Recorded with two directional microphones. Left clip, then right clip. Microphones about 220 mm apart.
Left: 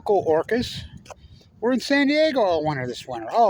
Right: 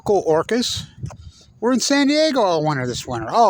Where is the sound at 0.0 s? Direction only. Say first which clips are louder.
Right 3 dB; 40° right (ahead or behind).